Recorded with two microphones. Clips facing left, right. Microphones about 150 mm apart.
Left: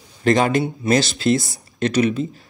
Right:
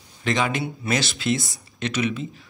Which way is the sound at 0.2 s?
40° left (ahead or behind).